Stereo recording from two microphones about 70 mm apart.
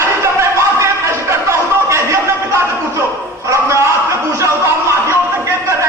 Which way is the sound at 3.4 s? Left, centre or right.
Right.